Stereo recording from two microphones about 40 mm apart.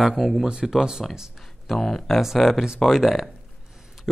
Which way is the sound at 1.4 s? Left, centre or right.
Centre.